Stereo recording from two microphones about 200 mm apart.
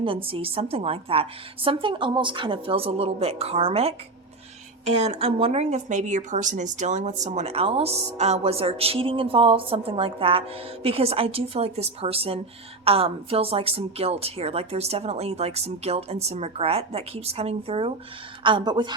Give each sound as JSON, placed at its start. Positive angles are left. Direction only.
{"t": 0.0, "sound": "a woman's voice", "side_deg": -25}